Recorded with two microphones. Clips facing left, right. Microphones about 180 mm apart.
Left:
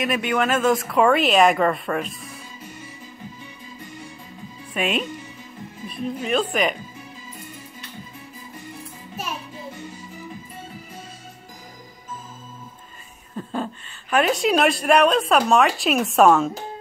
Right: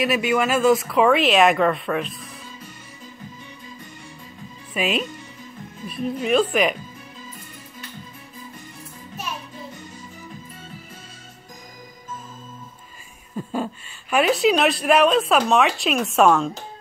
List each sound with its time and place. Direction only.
0.0 s speech: 5° right (ahead or behind)
4.7 s speech: 5° right (ahead or behind)
13.4 s a sound: 10° right (ahead or behind)
14.1 s speech: centre (ahead or behind)